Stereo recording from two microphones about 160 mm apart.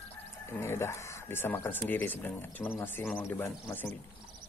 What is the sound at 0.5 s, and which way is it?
Speech, 15° left (ahead or behind).